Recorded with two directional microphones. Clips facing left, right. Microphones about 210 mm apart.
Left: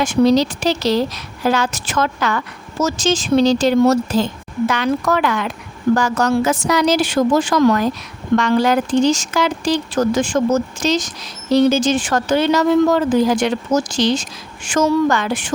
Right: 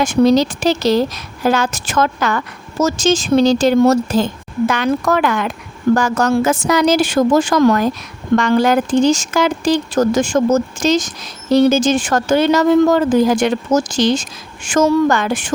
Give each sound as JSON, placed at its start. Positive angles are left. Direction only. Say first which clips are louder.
{"t": 0.0, "sound": "speech", "louder": "right 2 dB", "side_deg": -45}